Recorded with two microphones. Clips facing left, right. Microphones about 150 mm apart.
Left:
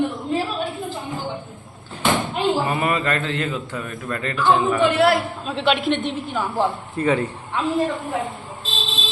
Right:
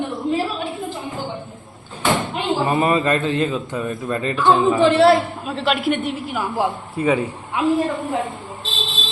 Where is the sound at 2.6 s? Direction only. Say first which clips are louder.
Right 4 dB; 25° right (ahead or behind).